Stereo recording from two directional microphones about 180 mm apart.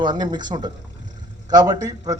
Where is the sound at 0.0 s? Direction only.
25° right (ahead or behind).